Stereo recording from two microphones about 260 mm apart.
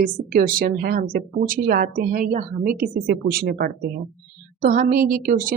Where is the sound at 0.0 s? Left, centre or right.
Right.